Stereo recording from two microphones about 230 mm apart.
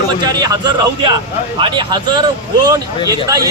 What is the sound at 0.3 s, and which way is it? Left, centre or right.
Speech, centre.